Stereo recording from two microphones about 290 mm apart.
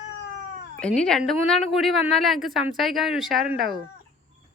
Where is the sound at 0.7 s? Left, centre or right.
Centre.